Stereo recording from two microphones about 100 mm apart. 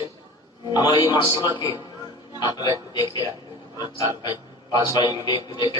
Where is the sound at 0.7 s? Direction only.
45° left (ahead or behind).